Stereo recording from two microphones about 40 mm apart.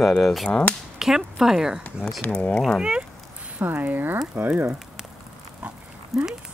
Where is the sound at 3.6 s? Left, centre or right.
Right.